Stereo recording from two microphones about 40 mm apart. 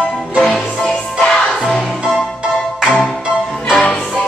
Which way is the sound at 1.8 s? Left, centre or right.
Centre.